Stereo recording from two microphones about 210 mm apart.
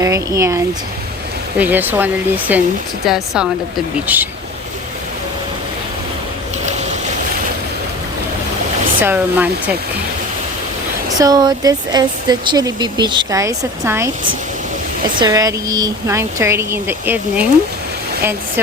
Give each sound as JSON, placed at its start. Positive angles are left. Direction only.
{"t": 0.0, "sound": "speech", "side_deg": -15}
{"t": 9.0, "sound": "speech", "side_deg": -10}
{"t": 11.2, "sound": "speech", "side_deg": -20}
{"t": 15.2, "sound": "speech", "side_deg": -15}